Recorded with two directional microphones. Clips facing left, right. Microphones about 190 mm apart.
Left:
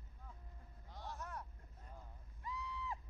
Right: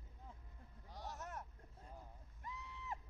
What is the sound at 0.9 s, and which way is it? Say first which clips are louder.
Vehicle: even; 15° right (ahead or behind).